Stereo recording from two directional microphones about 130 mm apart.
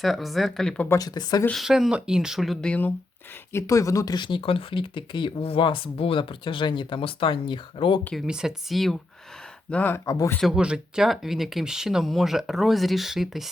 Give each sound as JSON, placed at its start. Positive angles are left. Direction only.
{"t": 0.0, "sound": "speech", "side_deg": 0}
{"t": 0.9, "sound": "speech", "side_deg": 30}
{"t": 1.5, "sound": "speech", "side_deg": 0}
{"t": 3.5, "sound": "speech", "side_deg": 25}
{"t": 8.1, "sound": "speech", "side_deg": -5}
{"t": 9.6, "sound": "speech", "side_deg": 10}
{"t": 10.1, "sound": "speech", "side_deg": 25}
{"t": 10.4, "sound": "speech", "side_deg": -5}